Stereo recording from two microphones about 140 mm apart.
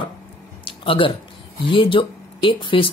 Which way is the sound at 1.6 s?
35° left (ahead or behind).